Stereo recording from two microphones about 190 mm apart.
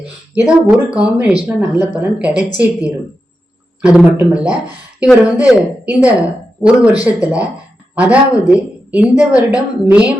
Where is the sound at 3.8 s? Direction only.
5° right (ahead or behind).